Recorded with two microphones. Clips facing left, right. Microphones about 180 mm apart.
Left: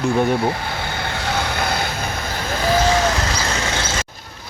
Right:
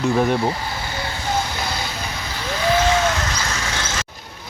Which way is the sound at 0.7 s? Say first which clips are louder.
Left 2 dB; 60° left (ahead or behind).